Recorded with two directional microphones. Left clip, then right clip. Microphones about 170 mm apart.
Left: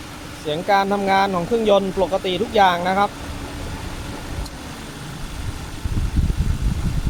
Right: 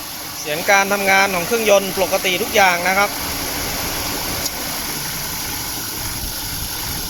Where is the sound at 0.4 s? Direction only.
20° left (ahead or behind).